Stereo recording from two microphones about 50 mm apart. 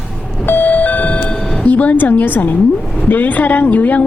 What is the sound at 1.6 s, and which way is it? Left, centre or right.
A woman's voice, left.